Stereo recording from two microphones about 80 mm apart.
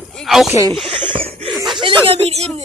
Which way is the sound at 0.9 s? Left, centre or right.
Right.